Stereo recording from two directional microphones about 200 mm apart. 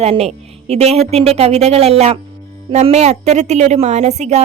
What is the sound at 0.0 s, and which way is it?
A woman's voice, 30° right (ahead or behind).